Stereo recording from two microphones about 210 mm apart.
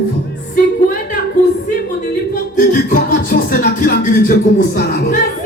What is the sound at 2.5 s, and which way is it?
Music, 40° left (ahead or behind).